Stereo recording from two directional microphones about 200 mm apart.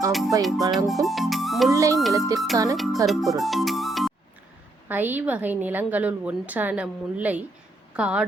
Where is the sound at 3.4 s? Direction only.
Centre (ahead or behind).